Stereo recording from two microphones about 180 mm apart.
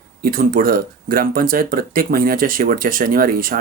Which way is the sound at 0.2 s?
50° right (ahead or behind).